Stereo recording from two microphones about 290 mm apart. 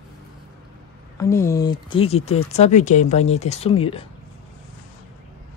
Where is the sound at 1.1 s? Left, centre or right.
Centre.